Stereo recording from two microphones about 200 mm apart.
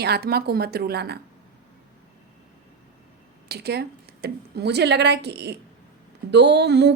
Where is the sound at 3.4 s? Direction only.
55° right (ahead or behind).